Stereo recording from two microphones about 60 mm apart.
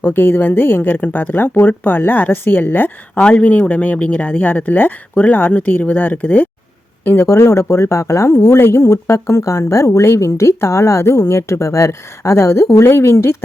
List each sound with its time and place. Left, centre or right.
0.0 s speech: left
3.2 s speech: centre; by 13.3 s left